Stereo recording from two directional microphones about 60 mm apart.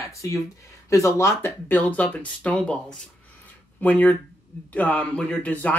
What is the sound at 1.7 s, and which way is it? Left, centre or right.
Speech, left.